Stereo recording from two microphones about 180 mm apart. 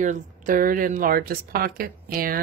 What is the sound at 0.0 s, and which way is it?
A woman's voice, 45° right (ahead or behind).